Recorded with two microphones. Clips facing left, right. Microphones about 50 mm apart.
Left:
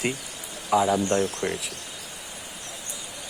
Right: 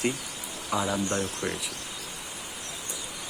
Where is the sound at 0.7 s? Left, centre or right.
Centre.